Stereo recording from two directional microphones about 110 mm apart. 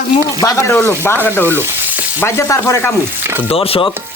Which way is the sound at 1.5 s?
20° right (ahead or behind).